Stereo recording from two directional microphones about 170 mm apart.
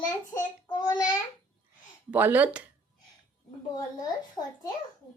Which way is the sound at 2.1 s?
10° right (ahead or behind).